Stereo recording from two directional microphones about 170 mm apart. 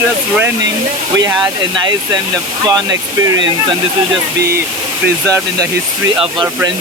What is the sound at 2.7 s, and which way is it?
Speech, 20° right (ahead or behind).